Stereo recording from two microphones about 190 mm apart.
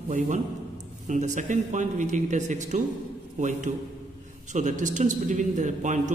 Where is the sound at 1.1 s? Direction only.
40° right (ahead or behind).